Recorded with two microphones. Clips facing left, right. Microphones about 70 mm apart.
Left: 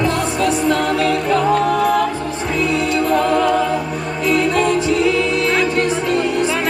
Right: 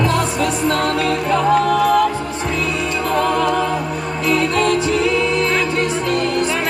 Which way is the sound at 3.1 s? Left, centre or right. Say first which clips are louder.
Left 1 dB; centre.